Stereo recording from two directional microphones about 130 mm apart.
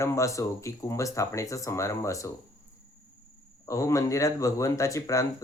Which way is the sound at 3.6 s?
25° left (ahead or behind).